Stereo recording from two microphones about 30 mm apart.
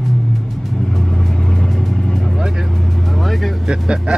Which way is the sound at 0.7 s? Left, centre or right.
Centre.